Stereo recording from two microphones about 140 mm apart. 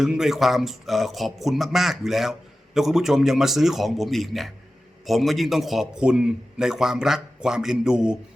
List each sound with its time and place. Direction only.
0.0 s a man's voice: 5° right (ahead or behind)